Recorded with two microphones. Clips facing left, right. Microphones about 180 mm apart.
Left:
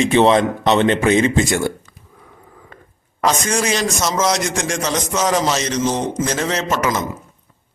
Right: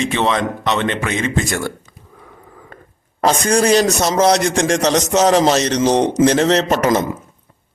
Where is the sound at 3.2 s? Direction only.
35° right (ahead or behind).